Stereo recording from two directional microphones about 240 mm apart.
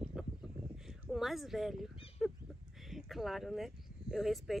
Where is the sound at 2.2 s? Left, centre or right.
Centre.